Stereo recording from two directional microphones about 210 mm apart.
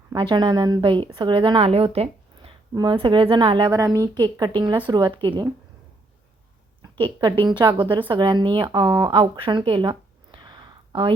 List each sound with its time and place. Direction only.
0.1 s a woman's voice: 20° right (ahead or behind)
6.9 s a woman's voice: 20° right (ahead or behind)